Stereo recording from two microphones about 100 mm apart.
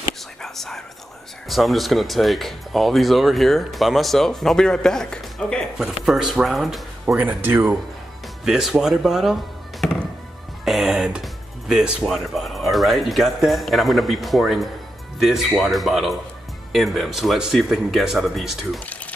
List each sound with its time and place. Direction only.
0.4 s speech: 5° left (ahead or behind)
6.0 s speech: 5° right (ahead or behind)
7.2 s speech: 20° right (ahead or behind)
8.5 s speech: 5° right (ahead or behind)